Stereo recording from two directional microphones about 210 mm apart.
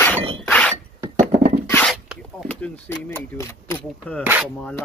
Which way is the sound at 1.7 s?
10° left (ahead or behind).